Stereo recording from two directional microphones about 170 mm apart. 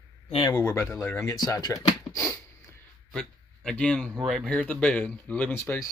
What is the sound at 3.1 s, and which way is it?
A man's voice, 5° left (ahead or behind).